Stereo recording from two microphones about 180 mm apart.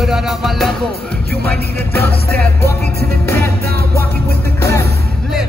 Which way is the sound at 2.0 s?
60° right (ahead or behind).